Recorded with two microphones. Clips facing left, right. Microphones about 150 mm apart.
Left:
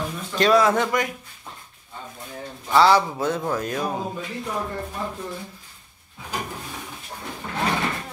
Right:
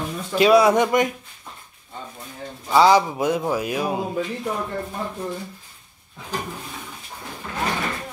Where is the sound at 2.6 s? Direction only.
15° right (ahead or behind).